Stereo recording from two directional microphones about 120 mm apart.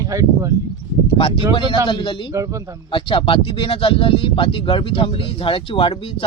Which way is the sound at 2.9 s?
45° left (ahead or behind).